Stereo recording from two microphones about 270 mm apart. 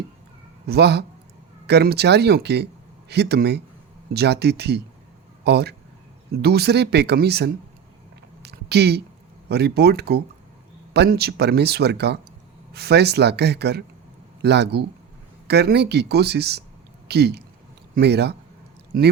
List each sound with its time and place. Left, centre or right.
0.7 s speech: right
8.4 s a sound: right
9.5 s speech: right